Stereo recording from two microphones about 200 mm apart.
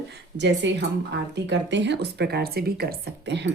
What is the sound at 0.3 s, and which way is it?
A woman's voice, 60° right (ahead or behind).